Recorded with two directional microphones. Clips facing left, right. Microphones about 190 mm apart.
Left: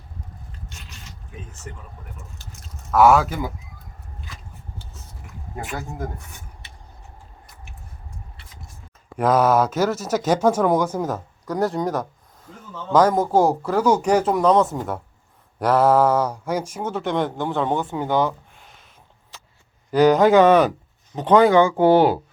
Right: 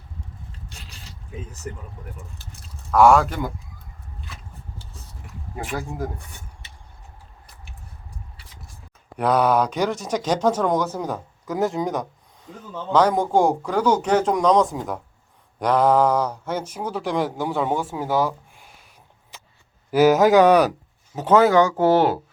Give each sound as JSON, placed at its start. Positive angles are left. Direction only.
{"t": 0.7, "sound": "a sound", "side_deg": -35}
{"t": 2.9, "sound": "speech", "side_deg": 0}
{"t": 9.1, "sound": "speech", "side_deg": 5}
{"t": 12.5, "sound": "speech", "side_deg": -20}
{"t": 12.9, "sound": "speech", "side_deg": 5}
{"t": 19.9, "sound": "speech", "side_deg": -5}